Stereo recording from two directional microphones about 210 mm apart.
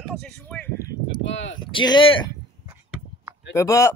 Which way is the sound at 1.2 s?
60° left (ahead or behind).